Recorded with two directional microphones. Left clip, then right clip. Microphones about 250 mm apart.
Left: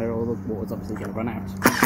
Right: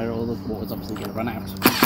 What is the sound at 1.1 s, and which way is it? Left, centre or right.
Speech, centre.